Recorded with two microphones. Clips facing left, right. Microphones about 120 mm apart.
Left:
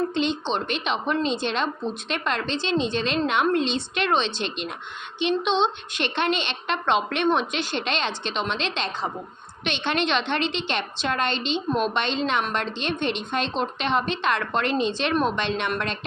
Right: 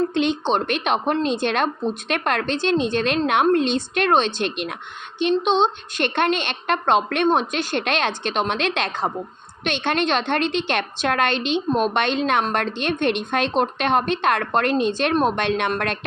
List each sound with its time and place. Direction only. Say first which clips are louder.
0.1 s a woman's voice: right 4 dB; 55° right (ahead or behind)
5.4 s a woman's voice: right 4 dB; 40° right (ahead or behind)